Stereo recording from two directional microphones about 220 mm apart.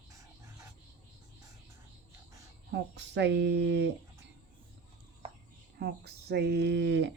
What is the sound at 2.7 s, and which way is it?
Speech, 50° right (ahead or behind).